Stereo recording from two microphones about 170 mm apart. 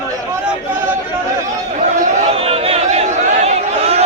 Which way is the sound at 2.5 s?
35° right (ahead or behind).